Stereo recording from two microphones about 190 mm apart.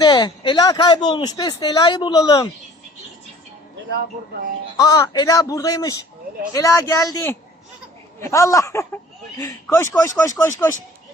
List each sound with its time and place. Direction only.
0.0 s speech: 20° left (ahead or behind)
4.8 s speech: 20° left (ahead or behind)